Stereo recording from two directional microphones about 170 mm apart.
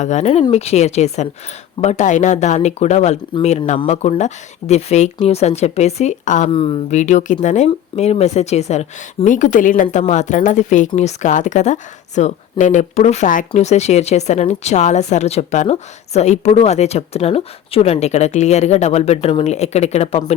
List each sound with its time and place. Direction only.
0.0 s a woman's voice: 45° left (ahead or behind)
6.5 s a woman's voice: 30° left (ahead or behind)
7.0 s a woman's voice: 45° left (ahead or behind)